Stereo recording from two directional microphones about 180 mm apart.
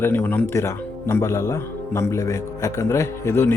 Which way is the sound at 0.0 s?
10° left (ahead or behind).